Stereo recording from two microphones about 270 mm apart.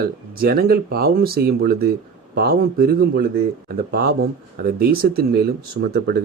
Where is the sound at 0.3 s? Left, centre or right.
Right.